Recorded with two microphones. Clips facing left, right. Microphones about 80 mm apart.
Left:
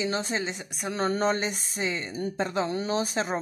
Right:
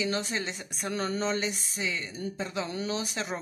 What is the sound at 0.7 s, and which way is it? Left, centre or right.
Speech, centre.